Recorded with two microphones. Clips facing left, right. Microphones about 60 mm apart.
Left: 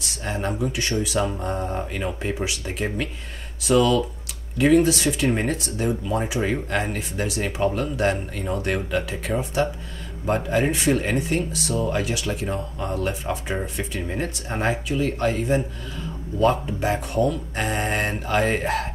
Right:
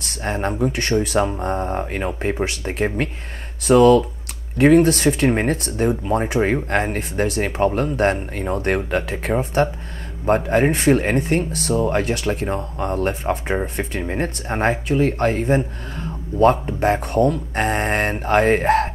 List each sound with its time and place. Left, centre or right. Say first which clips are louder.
0.3 s a man's voice: right 5 dB; right
14.0 s a man's voice: right 4 dB; right